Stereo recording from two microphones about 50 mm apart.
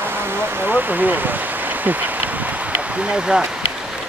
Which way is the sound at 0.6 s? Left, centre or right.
Right.